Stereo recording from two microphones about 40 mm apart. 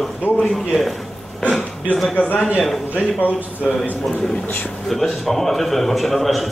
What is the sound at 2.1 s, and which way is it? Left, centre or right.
A man's voice, left.